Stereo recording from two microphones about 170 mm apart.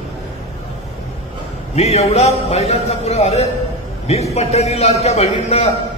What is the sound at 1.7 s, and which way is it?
A man's voice, 40° left (ahead or behind).